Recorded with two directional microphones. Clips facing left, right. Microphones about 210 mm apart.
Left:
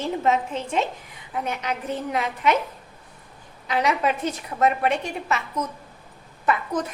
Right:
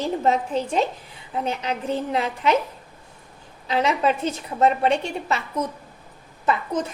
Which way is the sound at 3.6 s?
30° right (ahead or behind).